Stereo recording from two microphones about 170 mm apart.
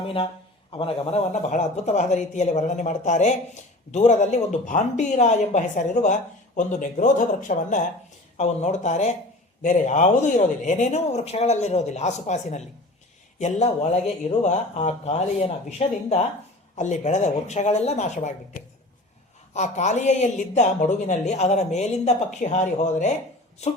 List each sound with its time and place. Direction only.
0.7 s speech: 30° left (ahead or behind)